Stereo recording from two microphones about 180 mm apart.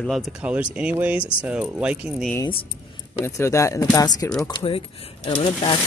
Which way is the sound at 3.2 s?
15° left (ahead or behind).